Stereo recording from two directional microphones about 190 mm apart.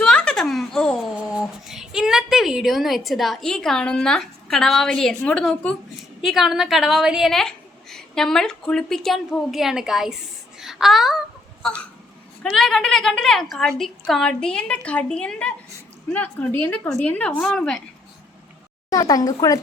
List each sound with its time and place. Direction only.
0.0 s a sound: 5° left (ahead or behind)
1.4 s a woman's voice: centre (ahead or behind)
18.9 s speech: 20° left (ahead or behind)